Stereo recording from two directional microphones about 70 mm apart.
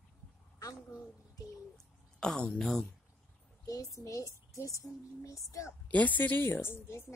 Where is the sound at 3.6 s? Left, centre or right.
Left.